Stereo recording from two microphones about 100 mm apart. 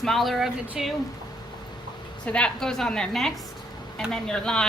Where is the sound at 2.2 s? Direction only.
10° left (ahead or behind).